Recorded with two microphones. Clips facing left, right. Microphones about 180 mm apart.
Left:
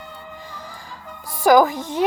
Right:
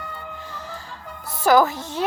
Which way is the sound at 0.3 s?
10° left (ahead or behind).